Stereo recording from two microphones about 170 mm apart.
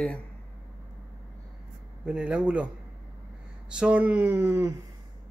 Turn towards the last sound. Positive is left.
turn(degrees=-15)  # may be behind; listen again after turning